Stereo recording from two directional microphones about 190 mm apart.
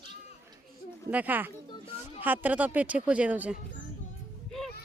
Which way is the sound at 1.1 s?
10° right (ahead or behind).